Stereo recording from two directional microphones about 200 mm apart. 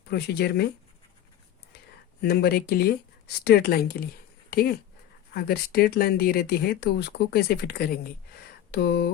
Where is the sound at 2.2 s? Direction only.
50° left (ahead or behind).